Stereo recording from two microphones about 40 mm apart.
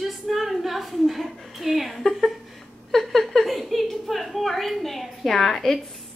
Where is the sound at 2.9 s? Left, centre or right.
Centre.